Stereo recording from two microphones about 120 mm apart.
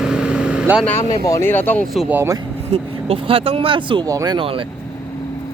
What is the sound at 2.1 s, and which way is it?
Speech, 20° right (ahead or behind).